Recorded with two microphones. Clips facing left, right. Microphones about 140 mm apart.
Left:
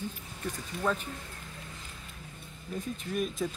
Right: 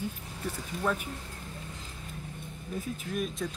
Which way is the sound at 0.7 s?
40° right (ahead or behind).